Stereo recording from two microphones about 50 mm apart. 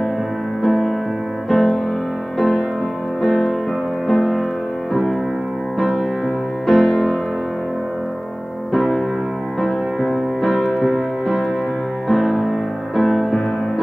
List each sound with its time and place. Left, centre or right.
0.6 s music: centre
6.6 s music: centre
8.7 s music: centre